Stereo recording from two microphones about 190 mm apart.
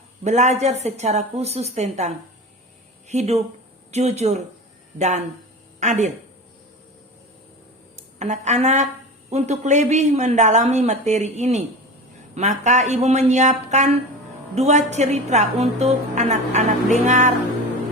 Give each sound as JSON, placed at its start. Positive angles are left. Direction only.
{"t": 0.3, "sound": "a woman's voice", "side_deg": -35}
{"t": 7.9, "sound": "a woman's voice", "side_deg": -35}